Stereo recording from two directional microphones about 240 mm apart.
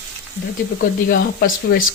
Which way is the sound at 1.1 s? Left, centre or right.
Left.